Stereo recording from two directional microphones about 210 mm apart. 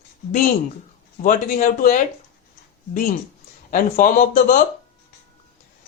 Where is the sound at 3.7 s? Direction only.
40° left (ahead or behind).